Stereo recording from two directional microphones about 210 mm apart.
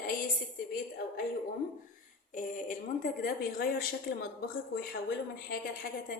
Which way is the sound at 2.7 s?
45° left (ahead or behind).